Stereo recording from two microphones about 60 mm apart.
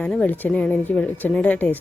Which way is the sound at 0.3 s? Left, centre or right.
Left.